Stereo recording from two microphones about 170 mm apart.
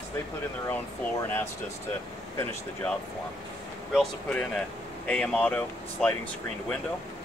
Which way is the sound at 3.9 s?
5° left (ahead or behind).